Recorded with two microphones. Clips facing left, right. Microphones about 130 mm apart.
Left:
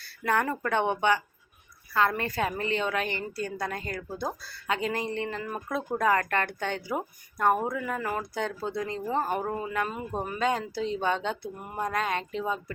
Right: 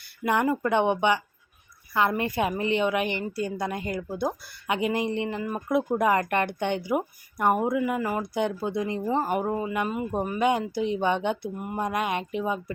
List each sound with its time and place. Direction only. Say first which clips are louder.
0.3 s a woman's voice: right 3 dB; 15° right (ahead or behind)